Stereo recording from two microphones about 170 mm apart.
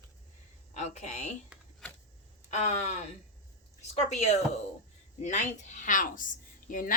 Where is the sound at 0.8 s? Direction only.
40° left (ahead or behind).